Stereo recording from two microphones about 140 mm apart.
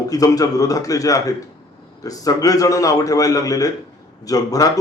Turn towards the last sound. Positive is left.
turn(degrees=25)  # may be behind; listen again after turning